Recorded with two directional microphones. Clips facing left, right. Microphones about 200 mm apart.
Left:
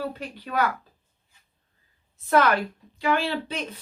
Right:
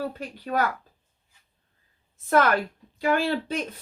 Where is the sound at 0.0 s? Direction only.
45° right (ahead or behind).